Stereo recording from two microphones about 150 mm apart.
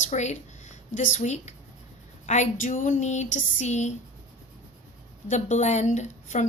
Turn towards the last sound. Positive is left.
turn(degrees=50)  # may be behind; listen again after turning